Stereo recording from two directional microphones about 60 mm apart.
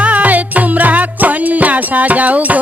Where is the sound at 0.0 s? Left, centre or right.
Right.